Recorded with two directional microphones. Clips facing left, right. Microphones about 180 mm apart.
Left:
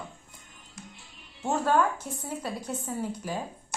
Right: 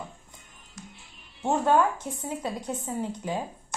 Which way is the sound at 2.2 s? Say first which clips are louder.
Right 3 dB; 20° right (ahead or behind).